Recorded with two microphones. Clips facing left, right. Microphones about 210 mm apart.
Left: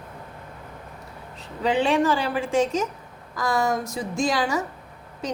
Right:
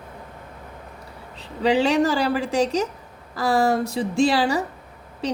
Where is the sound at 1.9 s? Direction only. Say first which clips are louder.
Right 2 dB; 40° right (ahead or behind).